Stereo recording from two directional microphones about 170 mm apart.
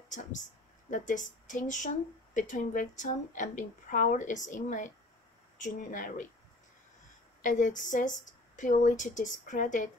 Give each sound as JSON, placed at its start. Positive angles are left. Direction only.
{"t": 0.1, "sound": "a woman's voice", "side_deg": 50}
{"t": 7.4, "sound": "a woman's voice", "side_deg": 50}